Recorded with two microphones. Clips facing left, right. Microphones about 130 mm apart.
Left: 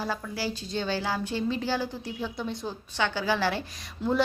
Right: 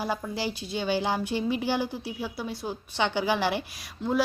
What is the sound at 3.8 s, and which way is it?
Speech, 5° right (ahead or behind).